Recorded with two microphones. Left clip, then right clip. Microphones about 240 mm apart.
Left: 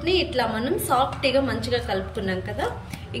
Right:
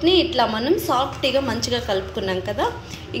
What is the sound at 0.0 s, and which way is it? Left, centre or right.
A woman's voice, centre.